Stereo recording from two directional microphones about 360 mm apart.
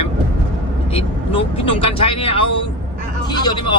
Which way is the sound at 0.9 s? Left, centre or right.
Centre.